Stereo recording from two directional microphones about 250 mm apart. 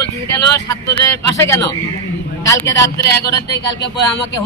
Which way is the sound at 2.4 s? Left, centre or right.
Centre.